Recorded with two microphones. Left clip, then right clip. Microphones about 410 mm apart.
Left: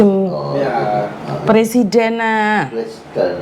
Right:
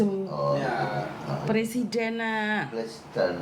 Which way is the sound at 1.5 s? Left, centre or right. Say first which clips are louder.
Left 16 dB; left.